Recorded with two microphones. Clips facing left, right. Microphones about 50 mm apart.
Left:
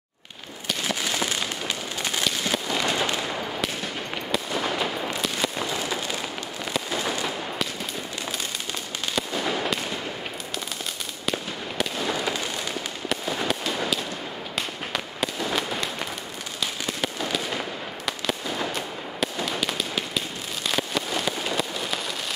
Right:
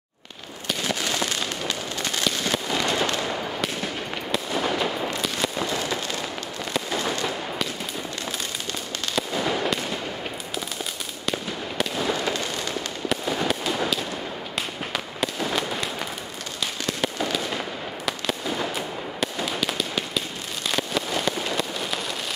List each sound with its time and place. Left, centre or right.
0.8 s fireworks: centre
9.1 s fireworks: centre
11.8 s fireworks: centre
17.0 s fireworks: centre